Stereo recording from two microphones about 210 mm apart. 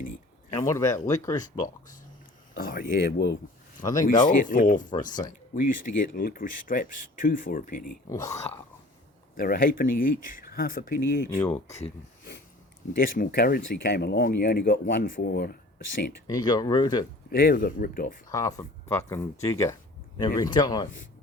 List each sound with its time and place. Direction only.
0.7 s speech: 15° left (ahead or behind)
2.6 s speech: 45° left (ahead or behind)
4.0 s speech: 40° left (ahead or behind)
8.1 s speech: 15° left (ahead or behind)
9.3 s speech: 45° left (ahead or behind)
11.3 s speech: 5° left (ahead or behind)
13.0 s speech: 45° left (ahead or behind)
16.2 s speech: 20° left (ahead or behind)
17.2 s speech: 45° left (ahead or behind)
18.3 s speech: 15° left (ahead or behind)